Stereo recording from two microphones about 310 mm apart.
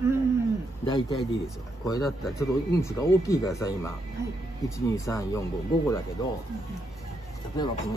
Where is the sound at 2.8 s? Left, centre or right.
Centre.